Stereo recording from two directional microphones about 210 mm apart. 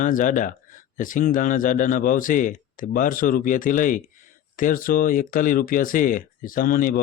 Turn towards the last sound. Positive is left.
turn(degrees=40)  # may be behind; listen again after turning